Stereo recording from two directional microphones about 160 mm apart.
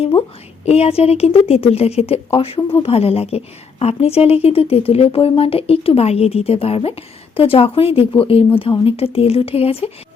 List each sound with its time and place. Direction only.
0.0 s a woman's voice: 35° left (ahead or behind)